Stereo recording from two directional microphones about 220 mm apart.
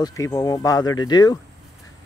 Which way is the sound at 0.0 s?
15° left (ahead or behind).